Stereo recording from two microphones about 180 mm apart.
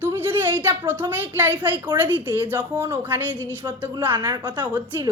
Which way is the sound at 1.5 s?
25° right (ahead or behind).